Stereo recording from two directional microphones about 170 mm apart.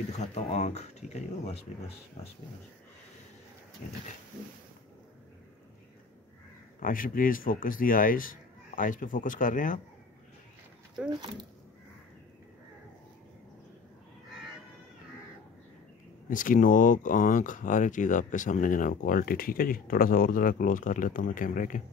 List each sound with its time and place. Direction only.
0.2 s speech: 40° left (ahead or behind)
3.8 s speech: 50° left (ahead or behind)
6.8 s speech: 55° left (ahead or behind)
11.1 s speech: 25° right (ahead or behind)
16.3 s speech: 50° left (ahead or behind)